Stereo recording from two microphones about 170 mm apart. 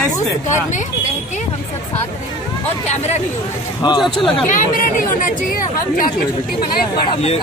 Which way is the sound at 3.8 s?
25° left (ahead or behind).